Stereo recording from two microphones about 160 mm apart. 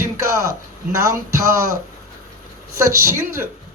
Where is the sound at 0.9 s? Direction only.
20° right (ahead or behind).